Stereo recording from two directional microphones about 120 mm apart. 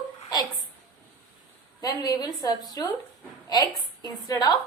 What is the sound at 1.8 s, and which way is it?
A woman's voice, 35° left (ahead or behind).